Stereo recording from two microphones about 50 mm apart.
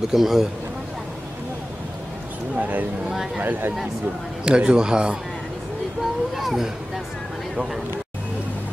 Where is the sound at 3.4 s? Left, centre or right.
Right.